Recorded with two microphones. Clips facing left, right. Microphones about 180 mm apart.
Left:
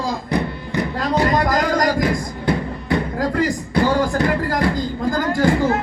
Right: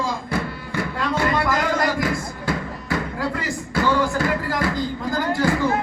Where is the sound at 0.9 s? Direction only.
40° left (ahead or behind).